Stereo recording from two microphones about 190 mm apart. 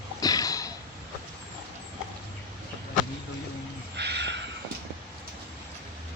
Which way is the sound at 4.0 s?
65° right (ahead or behind).